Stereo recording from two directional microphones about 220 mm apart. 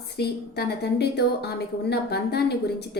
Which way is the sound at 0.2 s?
45° left (ahead or behind).